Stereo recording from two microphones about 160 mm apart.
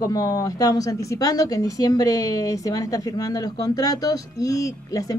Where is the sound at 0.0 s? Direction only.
25° left (ahead or behind).